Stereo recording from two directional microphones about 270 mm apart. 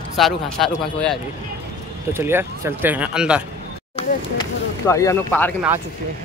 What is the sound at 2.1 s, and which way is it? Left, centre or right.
Speech, centre.